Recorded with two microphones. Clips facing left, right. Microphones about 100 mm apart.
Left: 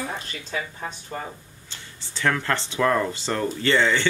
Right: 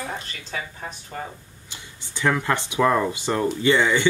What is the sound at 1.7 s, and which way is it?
Speech, 15° right (ahead or behind).